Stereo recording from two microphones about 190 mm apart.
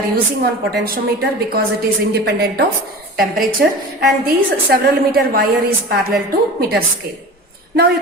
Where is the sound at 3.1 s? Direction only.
Centre (ahead or behind).